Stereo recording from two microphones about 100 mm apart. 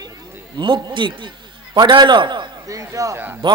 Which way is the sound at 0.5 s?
55° right (ahead or behind).